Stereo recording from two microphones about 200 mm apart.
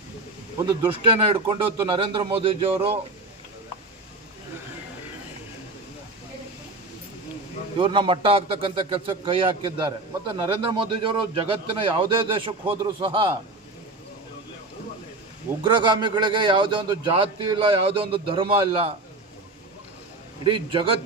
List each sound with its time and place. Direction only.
0.6 s a man's voice: 25° right (ahead or behind)
7.8 s a man's voice: 25° right (ahead or behind)
15.6 s a man's voice: 25° right (ahead or behind)
20.4 s a man's voice: 25° right (ahead or behind)